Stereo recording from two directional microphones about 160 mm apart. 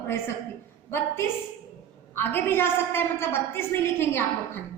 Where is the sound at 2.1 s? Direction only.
15° left (ahead or behind).